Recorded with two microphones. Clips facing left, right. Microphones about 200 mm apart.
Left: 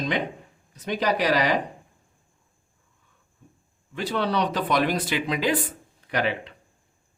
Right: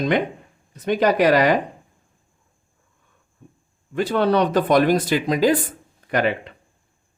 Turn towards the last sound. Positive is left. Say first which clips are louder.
# right 5 dB
turn(degrees=-50)  # may be behind; listen again after turning